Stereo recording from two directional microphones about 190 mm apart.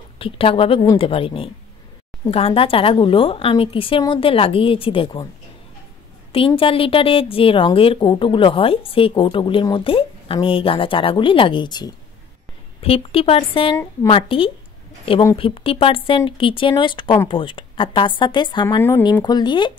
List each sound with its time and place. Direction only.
0.2 s a woman's voice: 30° left (ahead or behind)
6.3 s a woman's voice: 30° left (ahead or behind)
18.8 s a woman's voice: 15° left (ahead or behind)